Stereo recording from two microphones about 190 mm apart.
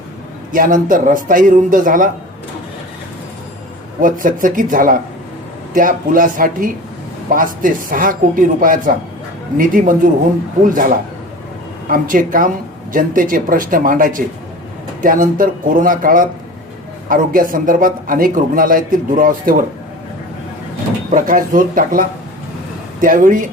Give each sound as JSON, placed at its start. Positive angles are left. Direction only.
{"t": 0.5, "sound": "a man's voice", "side_deg": -45}
{"t": 4.0, "sound": "a man's voice", "side_deg": -45}
{"t": 21.1, "sound": "a man's voice", "side_deg": -45}